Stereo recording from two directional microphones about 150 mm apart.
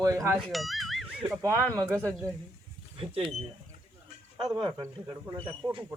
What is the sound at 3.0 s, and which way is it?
Speech, 35° right (ahead or behind).